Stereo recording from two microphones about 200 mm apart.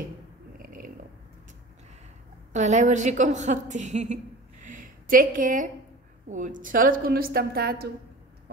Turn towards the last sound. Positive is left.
turn(degrees=-50)  # may be behind; listen again after turning